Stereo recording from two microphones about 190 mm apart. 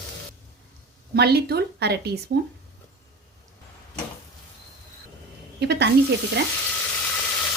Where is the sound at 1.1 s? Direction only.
55° right (ahead or behind).